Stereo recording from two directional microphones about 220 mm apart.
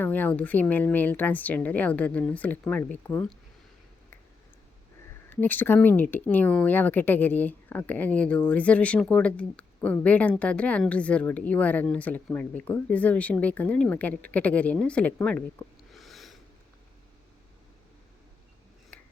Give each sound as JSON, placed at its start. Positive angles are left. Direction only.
{"t": 0.0, "sound": "speech", "side_deg": 10}
{"t": 5.3, "sound": "speech", "side_deg": 10}
{"t": 18.9, "sound": "a sound", "side_deg": 5}